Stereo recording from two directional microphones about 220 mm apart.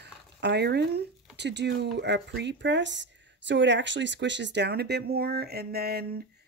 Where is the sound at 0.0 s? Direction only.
50° right (ahead or behind).